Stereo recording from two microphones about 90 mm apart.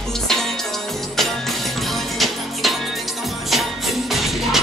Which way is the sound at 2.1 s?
Centre (ahead or behind).